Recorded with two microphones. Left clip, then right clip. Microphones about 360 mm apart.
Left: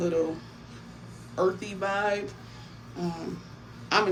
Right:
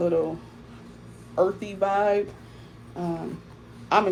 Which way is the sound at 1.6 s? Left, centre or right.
Centre.